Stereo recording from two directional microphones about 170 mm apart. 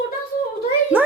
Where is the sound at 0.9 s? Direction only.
10° right (ahead or behind).